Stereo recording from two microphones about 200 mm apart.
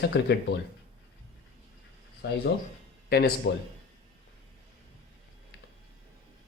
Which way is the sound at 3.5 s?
60° left (ahead or behind).